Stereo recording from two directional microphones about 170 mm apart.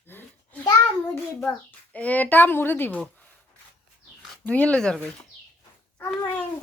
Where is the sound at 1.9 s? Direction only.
10° left (ahead or behind).